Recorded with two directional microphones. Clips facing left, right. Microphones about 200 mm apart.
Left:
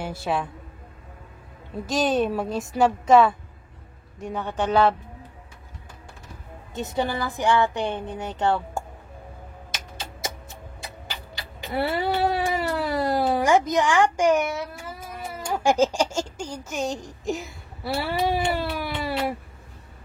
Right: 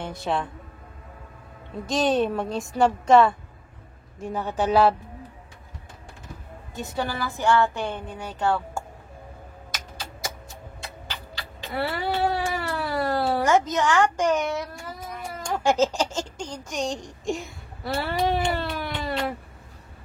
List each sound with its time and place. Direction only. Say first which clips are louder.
0.0 s a woman's voice: left 1 dB; 5° left (ahead or behind)
1.9 s a woman's voice: even; centre (ahead or behind)
6.7 s speech: left 3 dB; 20° left (ahead or behind)
11.6 s cat: left 3 dB; 20° left (ahead or behind)
15.4 s speech: left 1 dB; 10° left (ahead or behind)